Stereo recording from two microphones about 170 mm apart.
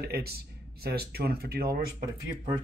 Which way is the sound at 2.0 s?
25° right (ahead or behind).